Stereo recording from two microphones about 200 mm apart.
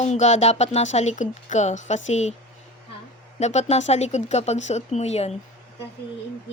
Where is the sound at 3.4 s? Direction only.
35° left (ahead or behind).